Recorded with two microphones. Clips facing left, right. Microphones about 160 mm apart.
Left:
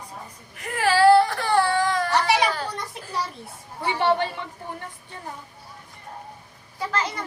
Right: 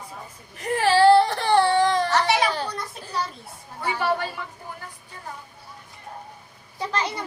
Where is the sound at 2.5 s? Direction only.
25° right (ahead or behind).